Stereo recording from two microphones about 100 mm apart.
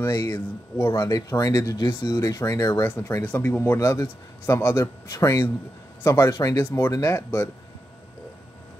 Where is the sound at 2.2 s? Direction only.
35° left (ahead or behind).